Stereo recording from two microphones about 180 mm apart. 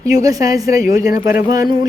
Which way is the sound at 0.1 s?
20° right (ahead or behind).